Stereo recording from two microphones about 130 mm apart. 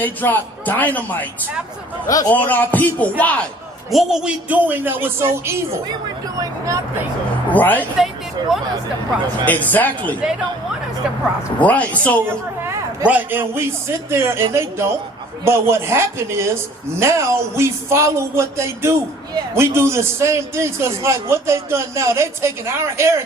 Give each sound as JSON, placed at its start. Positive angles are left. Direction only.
{"t": 0.0, "sound": "a man's voice", "side_deg": 15}
{"t": 2.0, "sound": "speech", "side_deg": 25}
{"t": 2.3, "sound": "a man's voice", "side_deg": 15}
{"t": 3.9, "sound": "speech", "side_deg": -5}
{"t": 7.5, "sound": "a man's voice", "side_deg": 15}
{"t": 7.9, "sound": "speech", "side_deg": -5}
{"t": 9.5, "sound": "a man's voice", "side_deg": 10}
{"t": 11.6, "sound": "a man's voice", "side_deg": 10}
{"t": 13.1, "sound": "speech", "side_deg": -15}